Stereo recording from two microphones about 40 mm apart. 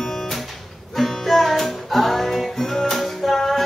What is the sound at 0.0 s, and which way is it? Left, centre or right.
Music, centre.